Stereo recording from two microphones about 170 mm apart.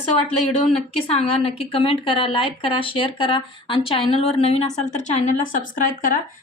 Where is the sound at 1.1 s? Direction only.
35° left (ahead or behind).